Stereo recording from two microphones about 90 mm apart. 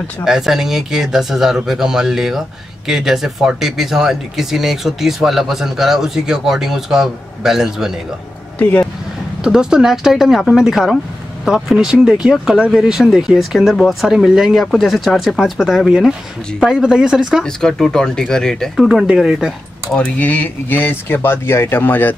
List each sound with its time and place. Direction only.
0.2 s speech: 5° right (ahead or behind)
9.4 s speech: 5° right (ahead or behind)
17.4 s speech: 5° left (ahead or behind)
18.9 s speech: 5° right (ahead or behind)
19.9 s speech: 10° left (ahead or behind)